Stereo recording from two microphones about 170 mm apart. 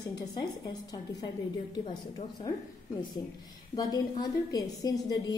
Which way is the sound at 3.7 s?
25° left (ahead or behind).